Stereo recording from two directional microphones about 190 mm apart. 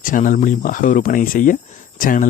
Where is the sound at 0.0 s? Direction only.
45° left (ahead or behind).